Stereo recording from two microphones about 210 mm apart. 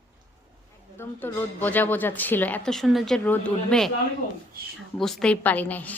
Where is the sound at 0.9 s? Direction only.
10° left (ahead or behind).